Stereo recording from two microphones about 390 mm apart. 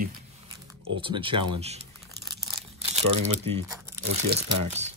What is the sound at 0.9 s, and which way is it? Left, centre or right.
Speech, centre.